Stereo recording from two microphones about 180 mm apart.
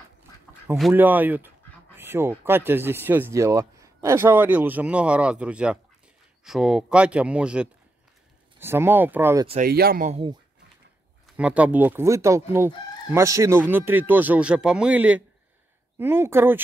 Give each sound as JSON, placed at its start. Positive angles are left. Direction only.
{"t": 0.9, "sound": "chicken", "side_deg": -10}
{"t": 6.4, "sound": "speech", "side_deg": -5}
{"t": 8.5, "sound": "chicken", "side_deg": -15}
{"t": 9.7, "sound": "speech", "side_deg": -60}
{"t": 11.3, "sound": "chicken", "side_deg": -5}